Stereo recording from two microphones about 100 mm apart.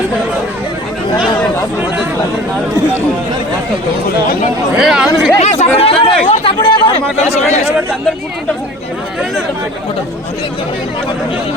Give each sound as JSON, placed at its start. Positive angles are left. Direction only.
{"t": 4.8, "sound": "speech", "side_deg": -5}
{"t": 5.4, "sound": "speech", "side_deg": 85}
{"t": 7.2, "sound": "speech", "side_deg": 90}